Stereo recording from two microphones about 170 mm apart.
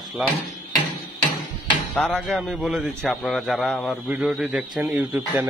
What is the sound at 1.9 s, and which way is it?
A man's voice, 5° left (ahead or behind).